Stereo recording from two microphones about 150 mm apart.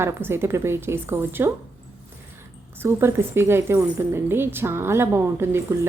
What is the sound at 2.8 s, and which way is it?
A woman's voice, 15° right (ahead or behind).